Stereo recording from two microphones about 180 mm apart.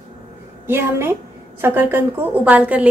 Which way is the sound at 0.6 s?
15° right (ahead or behind).